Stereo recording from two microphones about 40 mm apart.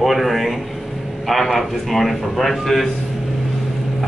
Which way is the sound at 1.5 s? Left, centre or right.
Centre.